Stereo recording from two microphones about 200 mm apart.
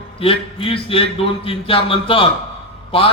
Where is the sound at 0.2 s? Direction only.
25° left (ahead or behind).